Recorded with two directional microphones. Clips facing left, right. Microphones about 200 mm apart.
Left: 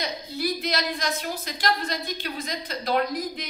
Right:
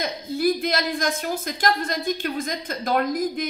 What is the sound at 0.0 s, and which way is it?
A woman's voice, 50° right (ahead or behind).